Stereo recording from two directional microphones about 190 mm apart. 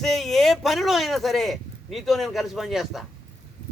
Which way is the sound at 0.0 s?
Centre (ahead or behind).